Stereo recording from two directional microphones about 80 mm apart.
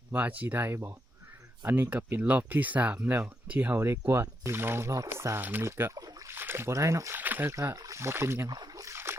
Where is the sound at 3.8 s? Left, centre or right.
Right.